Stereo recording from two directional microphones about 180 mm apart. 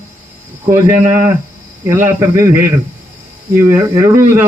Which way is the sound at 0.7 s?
15° right (ahead or behind).